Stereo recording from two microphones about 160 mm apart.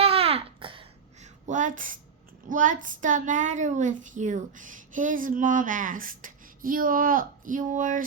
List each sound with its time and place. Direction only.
0.0 s babbling: 35° right (ahead or behind)
1.5 s a child's voice: 50° right (ahead or behind)